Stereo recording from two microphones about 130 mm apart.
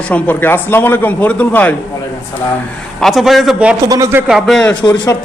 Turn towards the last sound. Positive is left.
turn(degrees=35)  # may be behind; listen again after turning